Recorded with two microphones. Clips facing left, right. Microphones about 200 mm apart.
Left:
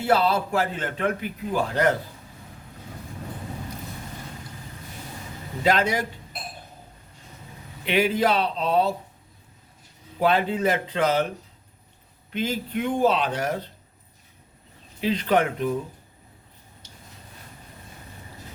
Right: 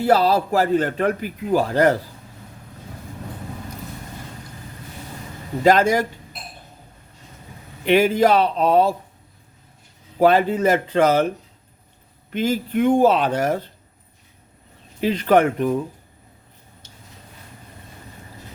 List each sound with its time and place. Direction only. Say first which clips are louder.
0.0 s a man's voice: right 4 dB; 40° right (ahead or behind)
5.6 s speech: right 6 dB; 45° right (ahead or behind)
7.9 s speech: right 6 dB; 45° right (ahead or behind)
10.2 s speech: right 6 dB; 45° right (ahead or behind)
12.3 s speech: right 6 dB; 50° right (ahead or behind)
15.0 s speech: right 5 dB; 45° right (ahead or behind)